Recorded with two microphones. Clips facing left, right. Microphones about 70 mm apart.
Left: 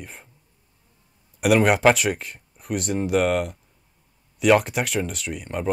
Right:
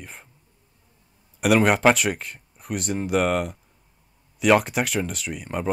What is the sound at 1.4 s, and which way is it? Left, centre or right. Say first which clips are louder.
Speech: left 1 dB; centre.